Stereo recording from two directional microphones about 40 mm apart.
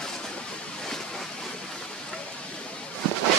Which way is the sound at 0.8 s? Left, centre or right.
Centre.